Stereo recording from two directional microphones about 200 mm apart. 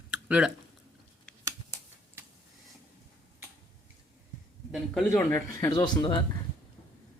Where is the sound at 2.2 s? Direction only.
10° right (ahead or behind).